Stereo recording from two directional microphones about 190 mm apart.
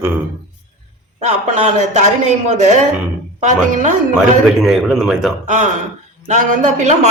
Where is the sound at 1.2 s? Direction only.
35° right (ahead or behind).